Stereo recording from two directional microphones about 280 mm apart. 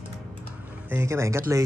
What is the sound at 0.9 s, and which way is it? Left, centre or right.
Music, centre.